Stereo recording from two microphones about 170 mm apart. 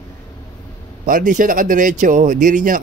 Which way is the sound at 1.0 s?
50° right (ahead or behind).